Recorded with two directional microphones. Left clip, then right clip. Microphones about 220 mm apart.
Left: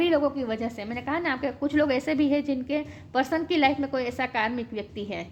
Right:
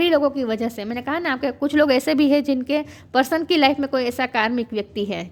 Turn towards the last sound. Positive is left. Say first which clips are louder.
# right 8 dB
turn(degrees=-45)  # may be behind; listen again after turning